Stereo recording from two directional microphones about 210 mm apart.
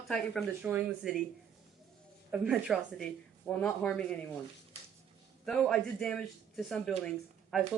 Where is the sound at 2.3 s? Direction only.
5° right (ahead or behind).